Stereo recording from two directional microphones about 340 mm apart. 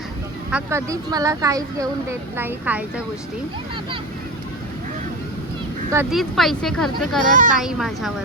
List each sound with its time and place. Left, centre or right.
0.5 s speech: centre
5.9 s speech: centre
7.3 s speech: right
7.6 s speech: centre